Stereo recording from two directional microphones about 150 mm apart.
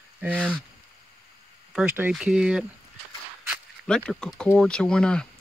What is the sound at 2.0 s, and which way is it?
Speech, 5° right (ahead or behind).